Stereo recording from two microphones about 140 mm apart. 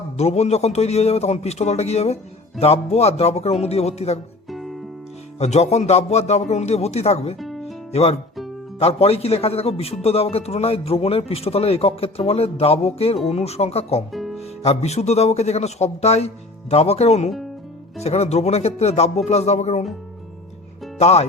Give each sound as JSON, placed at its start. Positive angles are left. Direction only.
{"t": 0.2, "sound": "a man's voice", "side_deg": 50}
{"t": 4.4, "sound": "music", "side_deg": 0}
{"t": 5.4, "sound": "a man's voice", "side_deg": 50}
{"t": 7.3, "sound": "music", "side_deg": 0}
{"t": 7.9, "sound": "a man's voice", "side_deg": 50}
{"t": 14.1, "sound": "music", "side_deg": 0}
{"t": 14.3, "sound": "a man's voice", "side_deg": 50}
{"t": 21.0, "sound": "a man's voice", "side_deg": 50}